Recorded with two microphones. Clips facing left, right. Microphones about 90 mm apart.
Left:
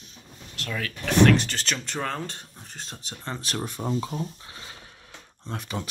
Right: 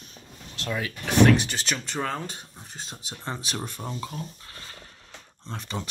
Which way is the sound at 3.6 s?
15° left (ahead or behind).